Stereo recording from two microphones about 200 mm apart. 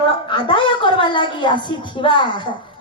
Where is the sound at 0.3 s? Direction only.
25° left (ahead or behind).